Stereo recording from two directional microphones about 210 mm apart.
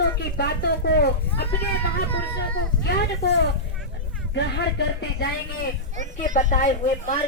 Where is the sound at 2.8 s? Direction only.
50° left (ahead or behind).